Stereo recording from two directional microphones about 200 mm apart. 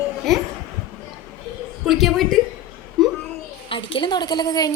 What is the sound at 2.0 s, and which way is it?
Speech, centre (ahead or behind).